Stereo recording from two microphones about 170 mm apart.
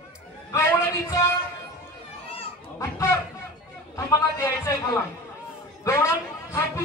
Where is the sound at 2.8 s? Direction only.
15° left (ahead or behind).